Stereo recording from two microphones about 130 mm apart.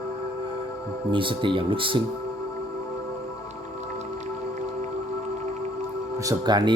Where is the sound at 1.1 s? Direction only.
40° right (ahead or behind).